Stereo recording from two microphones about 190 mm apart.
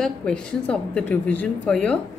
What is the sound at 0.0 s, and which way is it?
A woman's voice, 5° left (ahead or behind).